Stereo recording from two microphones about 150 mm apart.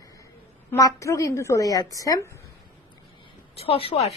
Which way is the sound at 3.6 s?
40° left (ahead or behind).